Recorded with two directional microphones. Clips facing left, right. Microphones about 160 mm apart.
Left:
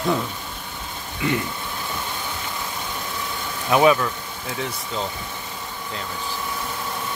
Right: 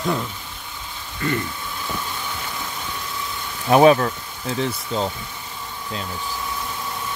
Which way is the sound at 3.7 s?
40° right (ahead or behind).